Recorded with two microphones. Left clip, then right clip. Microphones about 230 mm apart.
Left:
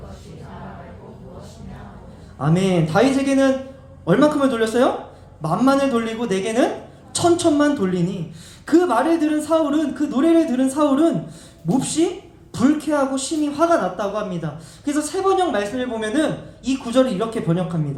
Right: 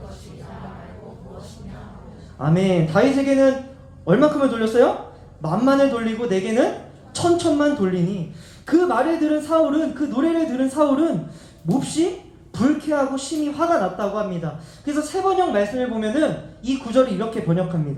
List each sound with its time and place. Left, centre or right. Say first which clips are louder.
2.4 s speech: even; left